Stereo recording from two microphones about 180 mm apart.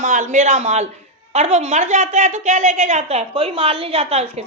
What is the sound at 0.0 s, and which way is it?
A woman's voice, 45° right (ahead or behind).